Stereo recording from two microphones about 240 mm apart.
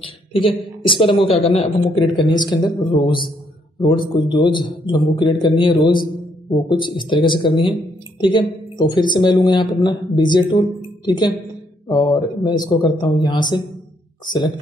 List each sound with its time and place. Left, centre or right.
0.0 s a man's voice: left